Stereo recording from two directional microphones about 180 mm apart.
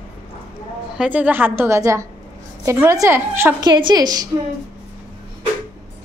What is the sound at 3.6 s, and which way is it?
Speech, 25° right (ahead or behind).